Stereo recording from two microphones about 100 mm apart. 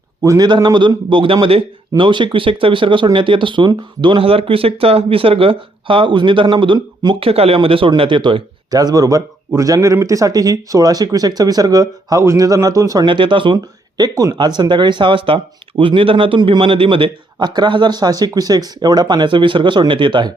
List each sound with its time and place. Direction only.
0.2 s a man's voice: 30° right (ahead or behind)
0.4 s speech: 50° right (ahead or behind); by 1.6 s 65° right (ahead or behind)
2.0 s speech: 55° right (ahead or behind)
7.2 s speech: 70° right (ahead or behind); by 8.4 s 55° right (ahead or behind)
8.7 s speech: 40° right (ahead or behind)
13.1 s a man's voice: 55° right (ahead or behind)